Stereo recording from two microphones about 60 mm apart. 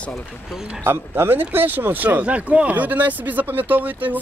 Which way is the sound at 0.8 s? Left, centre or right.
Right.